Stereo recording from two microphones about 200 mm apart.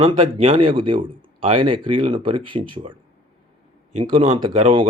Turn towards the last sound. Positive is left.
turn(degrees=-25)  # may be behind; listen again after turning